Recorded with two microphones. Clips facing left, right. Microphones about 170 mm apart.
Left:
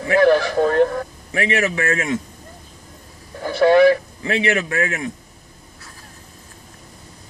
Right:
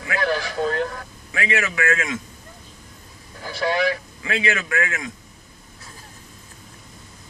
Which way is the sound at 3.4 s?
55° left (ahead or behind).